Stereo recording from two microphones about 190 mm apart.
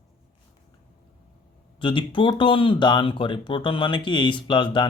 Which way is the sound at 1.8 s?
25° left (ahead or behind).